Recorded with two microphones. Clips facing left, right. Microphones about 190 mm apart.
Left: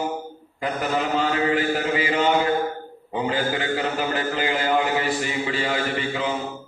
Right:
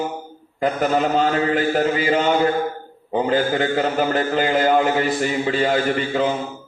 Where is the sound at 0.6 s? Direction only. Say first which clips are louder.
Right 6 dB; 45° right (ahead or behind).